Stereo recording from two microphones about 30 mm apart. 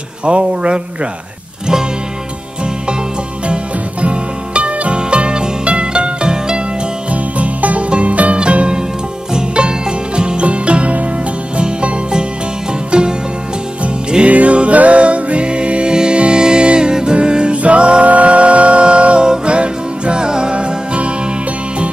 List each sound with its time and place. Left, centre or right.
0.2 s speech: right
4.0 s music: right
7.1 s music: right
8.4 s music: right
14.2 s music: right
15.9 s music: right
19.2 s music: right
19.5 s music: right
20.5 s music: right